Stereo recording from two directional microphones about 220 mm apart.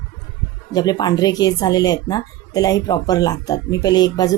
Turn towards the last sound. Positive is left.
turn(degrees=15)  # may be behind; listen again after turning